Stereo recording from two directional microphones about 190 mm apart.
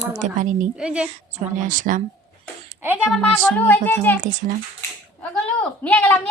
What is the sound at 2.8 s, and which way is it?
Speech, 5° right (ahead or behind).